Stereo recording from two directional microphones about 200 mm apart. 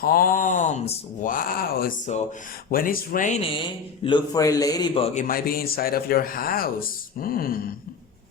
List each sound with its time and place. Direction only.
0.0 s speech: 45° left (ahead or behind); by 5.2 s 30° left (ahead or behind)
5.3 s speech: 50° left (ahead or behind)